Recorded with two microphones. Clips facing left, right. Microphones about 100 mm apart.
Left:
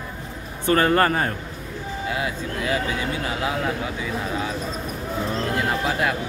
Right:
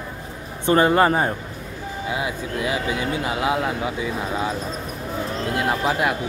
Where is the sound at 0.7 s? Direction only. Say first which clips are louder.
Right 2 dB; 15° right (ahead or behind).